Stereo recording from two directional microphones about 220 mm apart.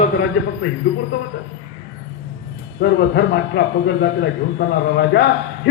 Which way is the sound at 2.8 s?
50° left (ahead or behind).